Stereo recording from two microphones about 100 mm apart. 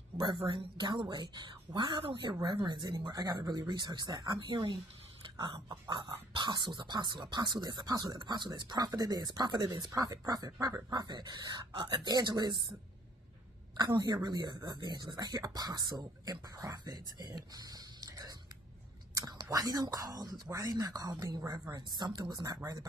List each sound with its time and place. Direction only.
0.4 s speech: 50° right (ahead or behind)
13.7 s speech: 45° right (ahead or behind)
17.4 s a sound: 40° right (ahead or behind)
19.1 s whispering: 40° right (ahead or behind)
19.5 s speech: 40° right (ahead or behind)
21.7 s speech: 45° right (ahead or behind)